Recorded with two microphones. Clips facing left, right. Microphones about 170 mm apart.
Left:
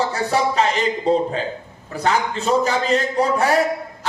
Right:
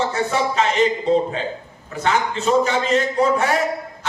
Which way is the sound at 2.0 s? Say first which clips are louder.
Even; 35° left (ahead or behind).